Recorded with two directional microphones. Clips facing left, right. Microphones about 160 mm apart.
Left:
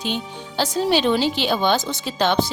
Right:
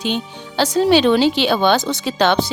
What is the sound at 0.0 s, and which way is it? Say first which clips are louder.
Speech: right 4 dB; 75° right (ahead or behind).